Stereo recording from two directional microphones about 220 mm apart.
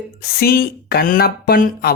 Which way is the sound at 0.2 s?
45° left (ahead or behind).